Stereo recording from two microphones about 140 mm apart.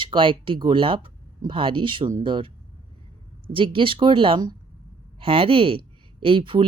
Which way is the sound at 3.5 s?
40° right (ahead or behind).